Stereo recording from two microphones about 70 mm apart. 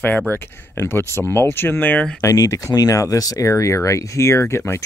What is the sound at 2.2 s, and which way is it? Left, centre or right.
Speech, left.